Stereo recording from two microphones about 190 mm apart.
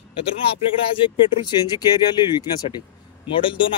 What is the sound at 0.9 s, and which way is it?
Speech, 25° left (ahead or behind).